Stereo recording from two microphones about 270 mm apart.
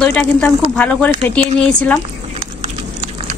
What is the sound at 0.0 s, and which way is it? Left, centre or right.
A woman's voice, centre.